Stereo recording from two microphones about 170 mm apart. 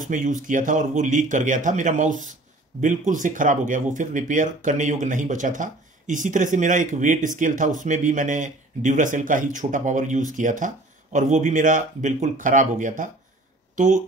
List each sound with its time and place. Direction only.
0.0 s speech: 50° right (ahead or behind)